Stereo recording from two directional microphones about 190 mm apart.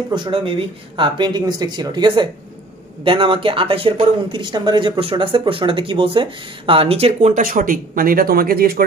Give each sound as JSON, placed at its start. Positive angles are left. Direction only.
{"t": 0.1, "sound": "speech", "side_deg": -25}